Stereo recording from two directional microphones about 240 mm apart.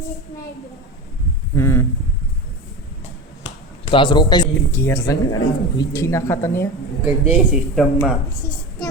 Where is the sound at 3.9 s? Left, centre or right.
Centre.